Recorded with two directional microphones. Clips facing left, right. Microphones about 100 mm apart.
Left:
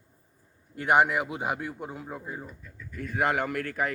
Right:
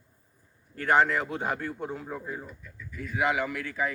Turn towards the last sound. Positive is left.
turn(degrees=60)  # may be behind; listen again after turning